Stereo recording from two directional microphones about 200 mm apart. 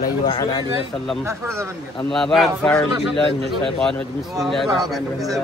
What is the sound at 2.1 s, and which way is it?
Speech, centre (ahead or behind).